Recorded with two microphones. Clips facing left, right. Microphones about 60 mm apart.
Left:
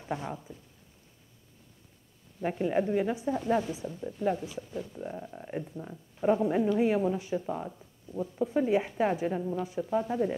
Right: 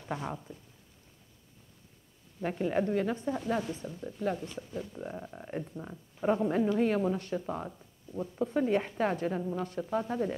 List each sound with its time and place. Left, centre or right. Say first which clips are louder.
0.1 s a woman's voice: left 1 dB; centre
2.4 s speech: left 2 dB; centre
4.6 s a woman's voice: left 1 dB; centre